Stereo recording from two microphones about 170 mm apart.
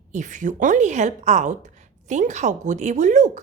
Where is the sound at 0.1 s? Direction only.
45° right (ahead or behind).